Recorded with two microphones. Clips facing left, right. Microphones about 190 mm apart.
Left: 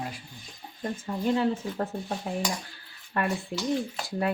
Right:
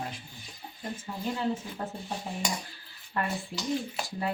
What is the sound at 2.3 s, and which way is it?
Dishes, 70° left (ahead or behind).